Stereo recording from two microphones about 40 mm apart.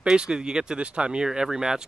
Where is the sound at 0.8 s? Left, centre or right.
Right; by 1.8 s centre.